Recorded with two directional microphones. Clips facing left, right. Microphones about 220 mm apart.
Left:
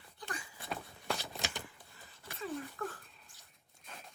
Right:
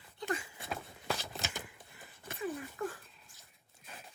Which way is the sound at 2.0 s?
15° right (ahead or behind).